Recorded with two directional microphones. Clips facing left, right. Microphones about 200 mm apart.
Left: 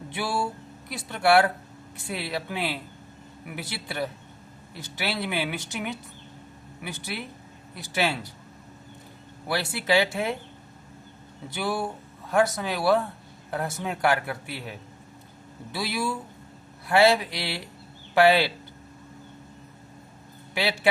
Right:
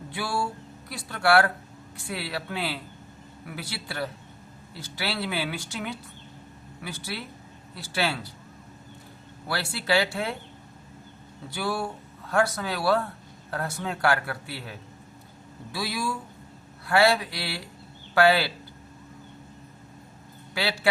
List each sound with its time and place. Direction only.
0.1 s a man's voice: 20° left (ahead or behind)
9.5 s speech: 20° left (ahead or behind)
11.5 s speech: 20° left (ahead or behind)
20.5 s a man's voice: 20° left (ahead or behind)